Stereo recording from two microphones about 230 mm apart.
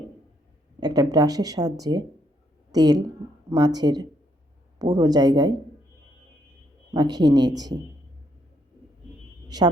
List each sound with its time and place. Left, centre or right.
0.8 s speech: centre
6.9 s speech: centre
9.5 s speech: centre